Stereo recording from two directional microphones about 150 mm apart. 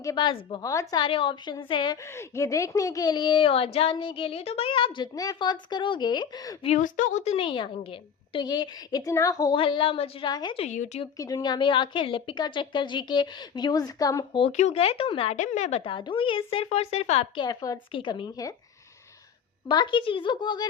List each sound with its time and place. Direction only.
0.0 s a woman's voice: 25° left (ahead or behind)
1.0 s a woman's voice: 35° left (ahead or behind)
2.1 s a woman's voice: 20° left (ahead or behind)
6.7 s a woman's voice: 60° left (ahead or behind)
7.3 s a woman's voice: 35° left (ahead or behind)
10.6 s a woman's voice: 50° left (ahead or behind)
11.2 s a woman's voice: 25° left (ahead or behind)
14.5 s a woman's voice: 45° left (ahead or behind)
15.4 s a woman's voice: 50° left (ahead or behind)
17.3 s a woman's voice: 30° left (ahead or behind)
19.6 s a woman's voice: 30° left (ahead or behind)